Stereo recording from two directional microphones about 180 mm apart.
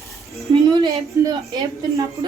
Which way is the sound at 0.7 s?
25° right (ahead or behind).